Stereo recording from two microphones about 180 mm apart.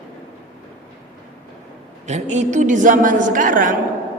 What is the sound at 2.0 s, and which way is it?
A woman's voice, 40° right (ahead or behind).